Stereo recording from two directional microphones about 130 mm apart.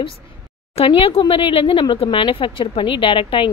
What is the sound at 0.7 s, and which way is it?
A woman's voice, 45° left (ahead or behind).